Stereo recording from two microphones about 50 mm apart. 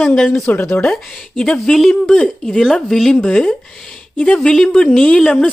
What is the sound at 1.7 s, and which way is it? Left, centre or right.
Speech, centre.